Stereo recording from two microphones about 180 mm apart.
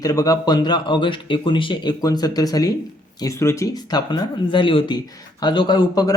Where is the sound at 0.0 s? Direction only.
20° left (ahead or behind).